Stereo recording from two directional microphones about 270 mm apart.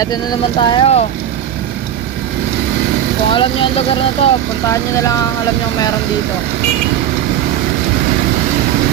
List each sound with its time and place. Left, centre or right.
0.0 s speech: centre
3.3 s speech: centre